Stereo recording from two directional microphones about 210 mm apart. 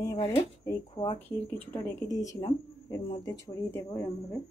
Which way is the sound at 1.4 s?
10° left (ahead or behind).